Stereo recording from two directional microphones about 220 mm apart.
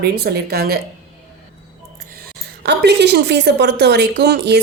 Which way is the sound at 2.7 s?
50° right (ahead or behind).